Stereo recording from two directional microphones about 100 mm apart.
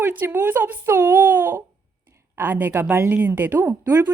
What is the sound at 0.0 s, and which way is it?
A woman's voice, 20° right (ahead or behind).